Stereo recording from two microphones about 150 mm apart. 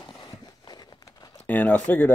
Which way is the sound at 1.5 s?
10° left (ahead or behind).